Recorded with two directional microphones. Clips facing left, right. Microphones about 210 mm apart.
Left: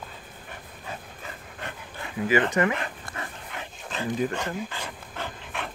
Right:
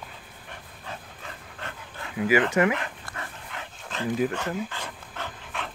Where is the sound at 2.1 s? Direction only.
10° right (ahead or behind).